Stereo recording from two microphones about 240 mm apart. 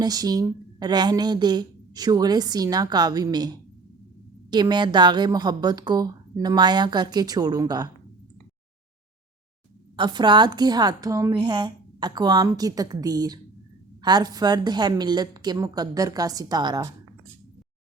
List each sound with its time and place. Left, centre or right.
0.0 s a woman's voice: centre
9.9 s a woman's voice: centre